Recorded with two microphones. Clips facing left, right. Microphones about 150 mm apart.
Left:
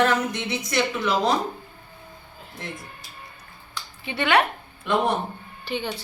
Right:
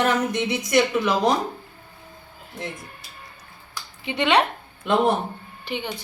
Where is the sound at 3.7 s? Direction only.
20° right (ahead or behind).